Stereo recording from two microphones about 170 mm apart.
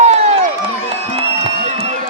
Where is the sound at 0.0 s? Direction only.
40° right (ahead or behind).